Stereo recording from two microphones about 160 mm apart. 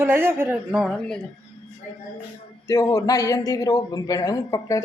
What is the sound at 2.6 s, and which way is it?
A man's voice, 20° left (ahead or behind).